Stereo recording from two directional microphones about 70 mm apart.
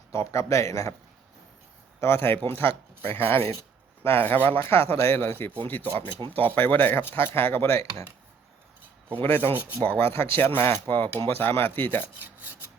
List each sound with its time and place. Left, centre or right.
0.1 s speech: left
2.0 s speech: left
4.6 s speech: left
9.2 s speech: left
9.6 s speech: right
10.0 s speech: left
12.2 s filing: right